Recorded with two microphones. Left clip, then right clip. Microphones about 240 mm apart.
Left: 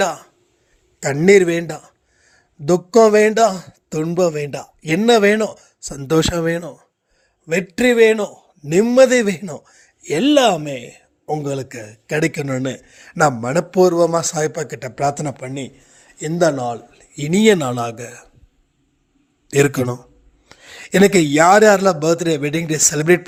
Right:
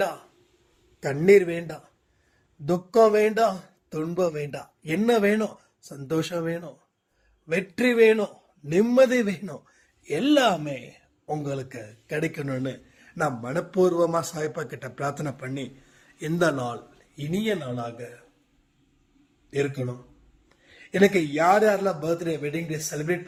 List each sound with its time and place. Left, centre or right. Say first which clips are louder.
0.9 s a man's voice: left 6 dB; left; by 16.8 s centre
16.9 s speech: left 11 dB; left
19.5 s speech: left 12 dB; left